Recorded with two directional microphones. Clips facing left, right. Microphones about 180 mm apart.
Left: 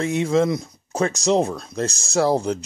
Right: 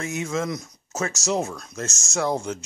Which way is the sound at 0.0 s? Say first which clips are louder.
Left 8 dB; 30° left (ahead or behind).